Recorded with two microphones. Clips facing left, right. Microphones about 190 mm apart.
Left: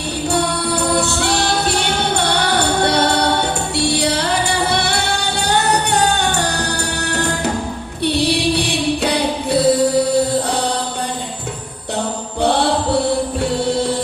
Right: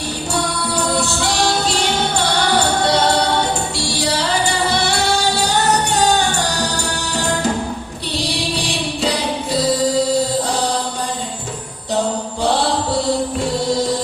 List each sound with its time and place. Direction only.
0.7 s music: 65° left (ahead or behind)
5.5 s music: 60° left (ahead or behind)
8.0 s music: 60° left (ahead or behind)